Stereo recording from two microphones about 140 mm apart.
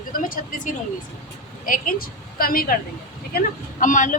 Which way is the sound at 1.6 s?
85° left.